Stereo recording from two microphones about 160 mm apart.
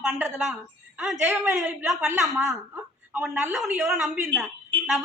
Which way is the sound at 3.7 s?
15° right (ahead or behind).